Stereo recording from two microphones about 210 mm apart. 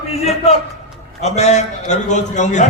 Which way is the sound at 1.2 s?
30° left (ahead or behind).